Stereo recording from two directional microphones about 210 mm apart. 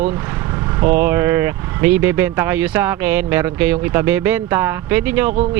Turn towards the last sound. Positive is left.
turn(degrees=-10)  # may be behind; listen again after turning